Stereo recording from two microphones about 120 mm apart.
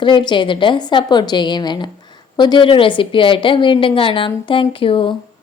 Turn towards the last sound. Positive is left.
turn(degrees=45)  # may be behind; listen again after turning